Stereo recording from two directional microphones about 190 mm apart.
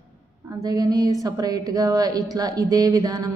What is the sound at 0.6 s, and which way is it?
Speech, 20° right (ahead or behind).